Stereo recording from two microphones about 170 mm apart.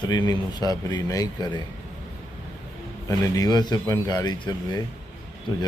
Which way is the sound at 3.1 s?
20° left (ahead or behind).